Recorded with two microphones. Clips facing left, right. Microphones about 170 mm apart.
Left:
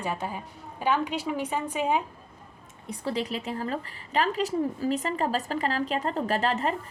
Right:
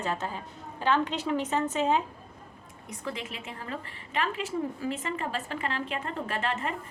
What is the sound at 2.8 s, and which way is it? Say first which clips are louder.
A woman's voice: left 7 dB; 35° left (ahead or behind).